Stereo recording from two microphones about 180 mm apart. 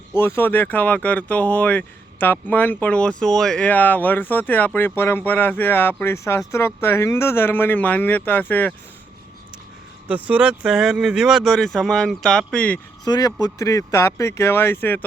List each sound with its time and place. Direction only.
0.1 s speech: 15° left (ahead or behind)
10.1 s speech: 5° right (ahead or behind)
13.1 s speech: 20° left (ahead or behind)